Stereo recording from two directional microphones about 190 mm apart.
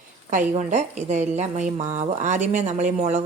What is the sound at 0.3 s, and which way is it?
A woman's voice, 40° right (ahead or behind).